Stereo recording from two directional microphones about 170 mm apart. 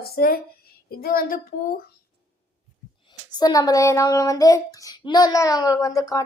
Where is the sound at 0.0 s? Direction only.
65° left (ahead or behind).